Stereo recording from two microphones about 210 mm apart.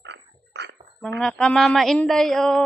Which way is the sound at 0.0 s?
60° right (ahead or behind).